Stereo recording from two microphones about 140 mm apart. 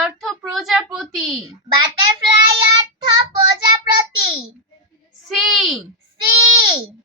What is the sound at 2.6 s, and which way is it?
Child singing, 35° right (ahead or behind).